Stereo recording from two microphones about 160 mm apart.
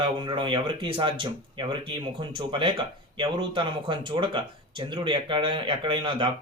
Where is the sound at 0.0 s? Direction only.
30° right (ahead or behind).